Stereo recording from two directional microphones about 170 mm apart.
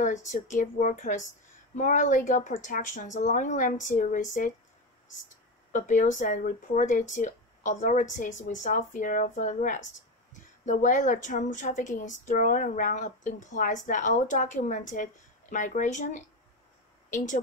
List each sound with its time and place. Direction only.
0.0 s a woman's voice: 45° left (ahead or behind)
5.7 s a woman's voice: 50° left (ahead or behind)